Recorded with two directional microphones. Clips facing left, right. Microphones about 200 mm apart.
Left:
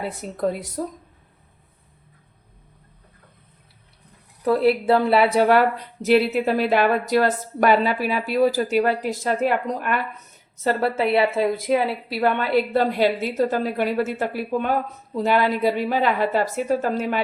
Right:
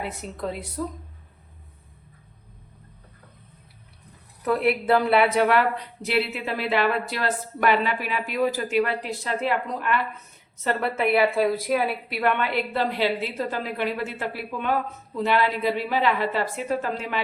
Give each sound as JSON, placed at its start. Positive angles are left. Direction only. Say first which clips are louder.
{"t": 0.0, "sound": "speech", "louder": "left 6 dB", "side_deg": 40}
{"t": 4.4, "sound": "speech", "louder": "left 4 dB", "side_deg": 30}
{"t": 10.6, "sound": "a woman's voice", "louder": "left 3 dB", "side_deg": 35}